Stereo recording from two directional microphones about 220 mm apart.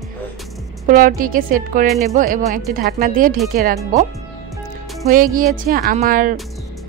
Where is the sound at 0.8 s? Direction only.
40° right (ahead or behind).